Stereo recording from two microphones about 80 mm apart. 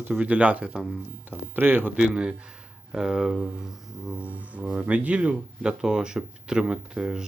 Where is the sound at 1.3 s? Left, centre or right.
Right.